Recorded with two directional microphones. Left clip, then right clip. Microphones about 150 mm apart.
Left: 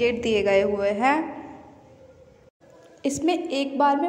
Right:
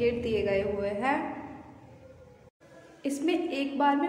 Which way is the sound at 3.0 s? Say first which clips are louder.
Left 5 dB; 45° left (ahead or behind).